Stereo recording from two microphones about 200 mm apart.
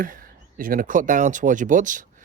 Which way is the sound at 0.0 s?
45° right (ahead or behind).